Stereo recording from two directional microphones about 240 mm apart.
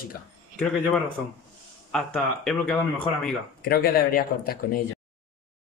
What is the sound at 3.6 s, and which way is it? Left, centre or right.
Speech, left.